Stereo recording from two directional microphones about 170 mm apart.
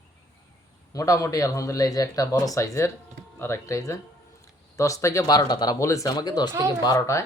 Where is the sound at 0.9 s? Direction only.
20° left (ahead or behind).